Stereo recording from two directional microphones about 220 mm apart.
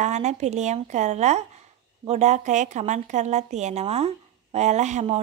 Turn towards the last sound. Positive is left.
turn(degrees=-30)  # may be behind; listen again after turning